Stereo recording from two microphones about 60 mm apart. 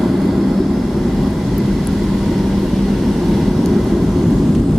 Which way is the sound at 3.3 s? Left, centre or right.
Centre.